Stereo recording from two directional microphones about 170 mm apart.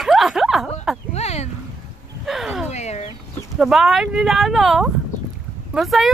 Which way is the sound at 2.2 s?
Centre (ahead or behind).